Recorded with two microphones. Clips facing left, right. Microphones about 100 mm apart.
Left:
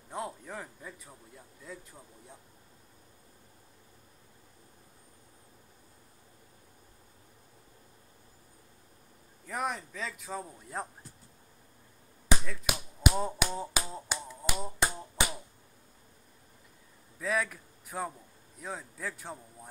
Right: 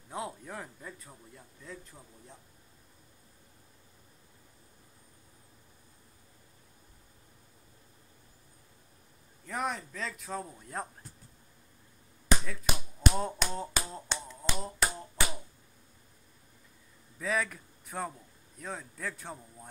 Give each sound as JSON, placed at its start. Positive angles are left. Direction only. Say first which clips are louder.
{"t": 0.1, "sound": "a man's voice", "louder": "even", "side_deg": 0}
{"t": 9.5, "sound": "a man's voice", "louder": "even", "side_deg": 0}
{"t": 13.0, "sound": "a man's voice", "louder": "left 1 dB", "side_deg": 5}
{"t": 14.2, "sound": "finger snapping", "louder": "left 1 dB", "side_deg": 10}
{"t": 14.8, "sound": "a sound", "louder": "left 2 dB", "side_deg": 15}
{"t": 17.2, "sound": "a man's voice", "louder": "even", "side_deg": 0}